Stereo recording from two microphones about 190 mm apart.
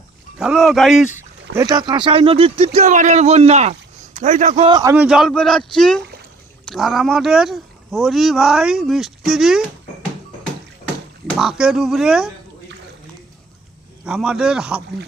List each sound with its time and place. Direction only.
0.3 s speech: centre (ahead or behind)
1.5 s speech: 20° right (ahead or behind); by 4.7 s 40° right (ahead or behind)
4.7 s a man's voice: 15° right (ahead or behind)
5.0 s speech: centre (ahead or behind)
11.3 s speech: centre (ahead or behind)
14.0 s speech: 5° right (ahead or behind)